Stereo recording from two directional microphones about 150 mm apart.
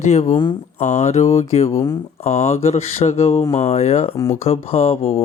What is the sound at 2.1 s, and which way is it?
Mantra, 45° left (ahead or behind).